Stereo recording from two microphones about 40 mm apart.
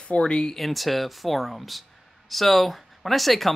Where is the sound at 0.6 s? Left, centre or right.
Centre.